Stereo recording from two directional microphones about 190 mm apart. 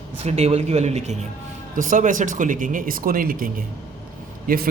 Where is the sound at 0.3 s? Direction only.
35° right (ahead or behind).